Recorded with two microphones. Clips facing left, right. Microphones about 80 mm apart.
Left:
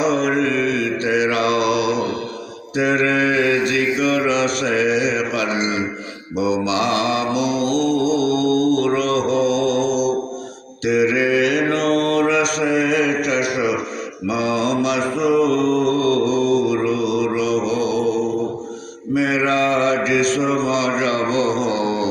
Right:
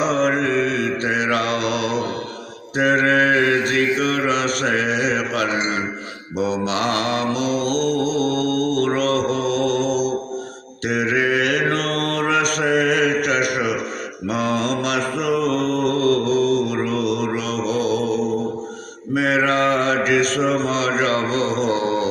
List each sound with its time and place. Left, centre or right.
0.0 s mantra: right